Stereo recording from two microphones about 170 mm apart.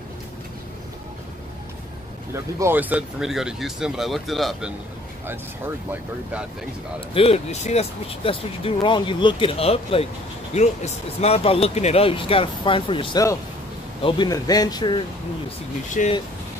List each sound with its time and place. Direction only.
2.3 s speech: 15° right (ahead or behind)
7.2 s speech: 35° left (ahead or behind)
16.0 s speech: 50° left (ahead or behind)